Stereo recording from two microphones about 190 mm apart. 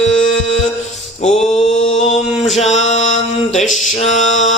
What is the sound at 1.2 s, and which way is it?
Mantra, 35° left (ahead or behind).